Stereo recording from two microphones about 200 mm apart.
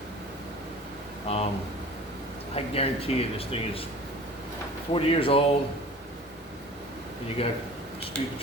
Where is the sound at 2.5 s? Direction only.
30° left (ahead or behind).